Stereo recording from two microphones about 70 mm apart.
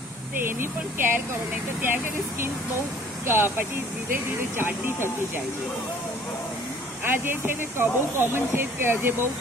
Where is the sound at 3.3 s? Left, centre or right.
Right.